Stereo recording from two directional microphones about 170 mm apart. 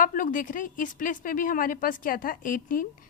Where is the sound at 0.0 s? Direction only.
55° left (ahead or behind).